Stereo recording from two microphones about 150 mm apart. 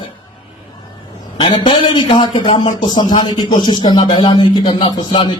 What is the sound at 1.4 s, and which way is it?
A man's voice, 35° left (ahead or behind).